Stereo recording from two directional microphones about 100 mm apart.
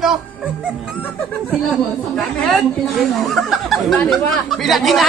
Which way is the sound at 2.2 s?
5° left (ahead or behind).